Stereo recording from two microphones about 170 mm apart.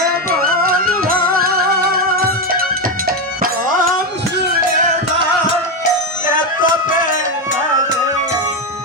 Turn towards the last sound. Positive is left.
turn(degrees=50)  # may be behind; listen again after turning